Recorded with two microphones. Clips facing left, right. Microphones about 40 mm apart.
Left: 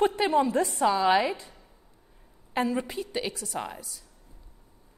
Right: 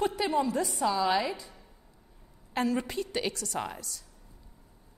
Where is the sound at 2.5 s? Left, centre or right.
Centre.